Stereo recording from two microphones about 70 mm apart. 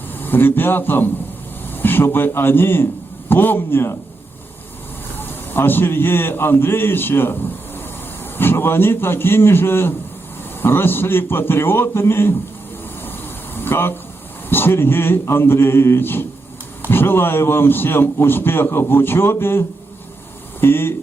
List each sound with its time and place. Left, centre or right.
0.1 s a man's voice: left
5.5 s a man's voice: left
13.7 s a man's voice: left